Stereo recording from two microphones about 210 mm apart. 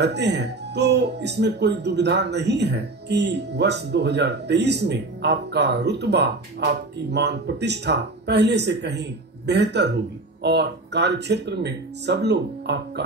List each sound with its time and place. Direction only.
0.0 s speech: 55° right (ahead or behind)